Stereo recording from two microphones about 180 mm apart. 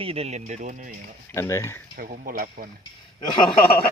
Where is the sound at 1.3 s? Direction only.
15° left (ahead or behind).